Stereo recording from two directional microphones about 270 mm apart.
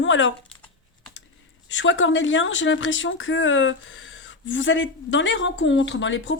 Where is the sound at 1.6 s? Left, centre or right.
Left.